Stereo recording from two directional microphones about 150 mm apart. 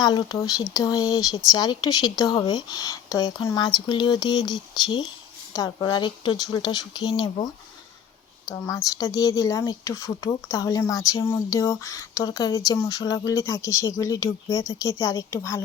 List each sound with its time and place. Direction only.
0.0 s speech: 25° left (ahead or behind)
8.4 s speech: 20° left (ahead or behind)